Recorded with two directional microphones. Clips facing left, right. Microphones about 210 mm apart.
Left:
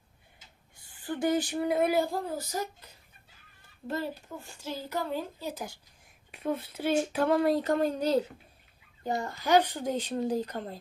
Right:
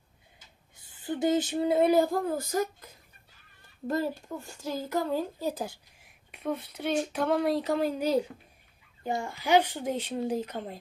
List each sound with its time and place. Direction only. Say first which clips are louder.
0.8 s a sound: right 2 dB; 20° right (ahead or behind)
2.0 s speech: right 4 dB; 50° right (ahead or behind)
6.3 s speech: left 1 dB; centre (ahead or behind)